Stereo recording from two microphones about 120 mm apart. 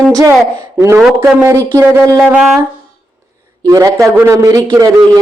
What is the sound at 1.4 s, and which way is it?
Speech, 25° right (ahead or behind).